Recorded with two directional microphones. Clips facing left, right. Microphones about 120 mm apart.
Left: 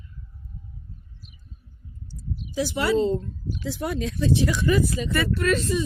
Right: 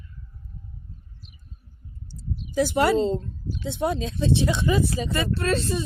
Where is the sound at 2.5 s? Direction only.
50° right (ahead or behind).